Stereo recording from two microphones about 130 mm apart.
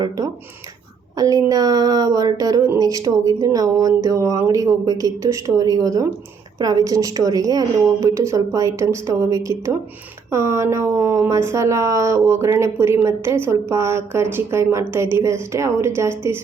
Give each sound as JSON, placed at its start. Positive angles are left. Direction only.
{"t": 1.1, "sound": "speech", "side_deg": -30}